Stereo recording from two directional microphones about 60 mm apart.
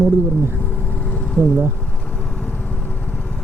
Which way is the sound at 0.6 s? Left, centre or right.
Left.